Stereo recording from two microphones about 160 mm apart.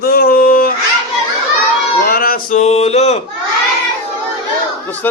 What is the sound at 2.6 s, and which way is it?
Speech, 40° left (ahead or behind).